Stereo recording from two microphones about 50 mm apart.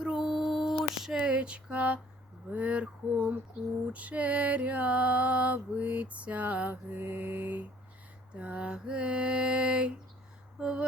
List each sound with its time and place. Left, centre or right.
0.0 s female singing: centre; by 2.0 s right
2.5 s music: right
3.6 s a sound: centre
3.9 s music: right
6.9 s mantra: right
8.3 s music: right